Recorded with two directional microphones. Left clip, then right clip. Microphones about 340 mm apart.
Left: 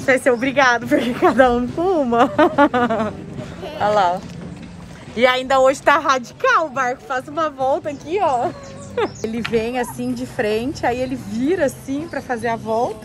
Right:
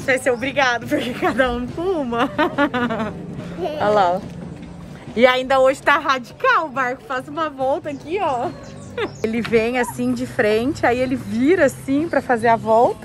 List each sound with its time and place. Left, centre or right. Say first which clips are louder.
0.0 s speech: left 3 dB; centre
3.6 s speech: even; centre